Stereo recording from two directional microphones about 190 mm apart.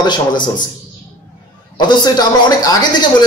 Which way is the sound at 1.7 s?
20° left (ahead or behind).